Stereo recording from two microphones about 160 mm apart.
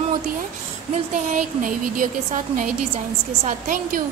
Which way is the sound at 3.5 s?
55° right (ahead or behind).